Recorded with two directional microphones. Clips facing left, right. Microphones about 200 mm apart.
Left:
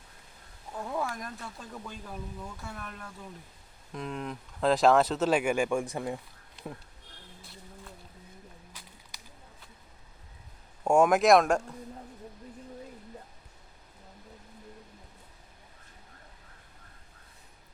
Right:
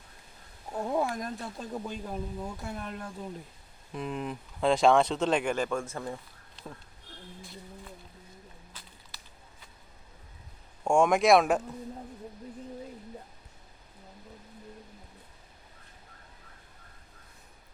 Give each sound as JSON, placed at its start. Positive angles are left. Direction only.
{"t": 0.7, "sound": "speech", "side_deg": -25}
{"t": 3.9, "sound": "speech", "side_deg": -5}
{"t": 10.8, "sound": "speech", "side_deg": 5}